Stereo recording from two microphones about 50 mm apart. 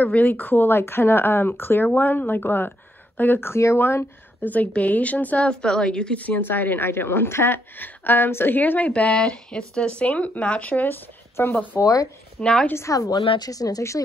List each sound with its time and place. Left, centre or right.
0.0 s a woman's voice: left
5.5 s a woman's voice: centre
6.4 s a woman's voice: left
6.9 s speech: left
8.5 s speech: left
11.4 s speech: left
11.7 s speech: left
12.4 s a woman's voice: centre
12.7 s speech: left
13.6 s speech: left